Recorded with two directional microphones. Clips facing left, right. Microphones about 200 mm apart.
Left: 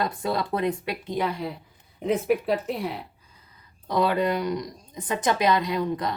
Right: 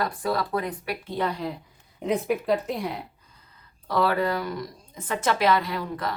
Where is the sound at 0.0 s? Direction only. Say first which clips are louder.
Even; 25° left (ahead or behind); by 3.0 s centre (ahead or behind).